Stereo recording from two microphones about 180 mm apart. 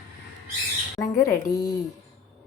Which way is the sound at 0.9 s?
20° left (ahead or behind).